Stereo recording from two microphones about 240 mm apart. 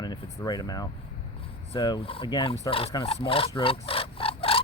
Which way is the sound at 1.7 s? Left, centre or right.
Centre.